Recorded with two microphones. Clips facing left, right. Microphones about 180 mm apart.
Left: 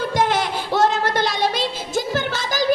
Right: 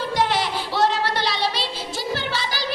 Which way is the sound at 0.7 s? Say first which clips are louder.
Left 3 dB; 50° left (ahead or behind).